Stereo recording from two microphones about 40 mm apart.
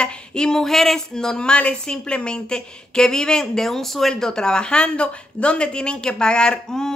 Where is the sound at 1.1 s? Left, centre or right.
Centre.